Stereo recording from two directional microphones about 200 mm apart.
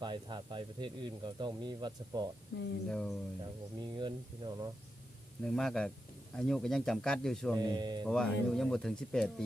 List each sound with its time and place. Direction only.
0.0 s speech: 20° right (ahead or behind)
2.5 s speech: 80° left
2.9 s speech: 5° left (ahead or behind)
3.8 s speech: 20° right (ahead or behind)
5.4 s speech: centre (ahead or behind)
7.6 s speech: 20° right (ahead or behind)
8.0 s speech: 5° left (ahead or behind)